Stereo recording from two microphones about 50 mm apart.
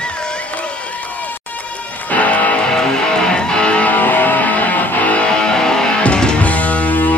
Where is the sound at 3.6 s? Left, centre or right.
Centre.